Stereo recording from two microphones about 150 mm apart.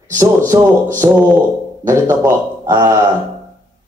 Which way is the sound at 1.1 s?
5° right (ahead or behind).